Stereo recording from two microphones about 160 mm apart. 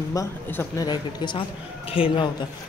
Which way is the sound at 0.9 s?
30° left (ahead or behind).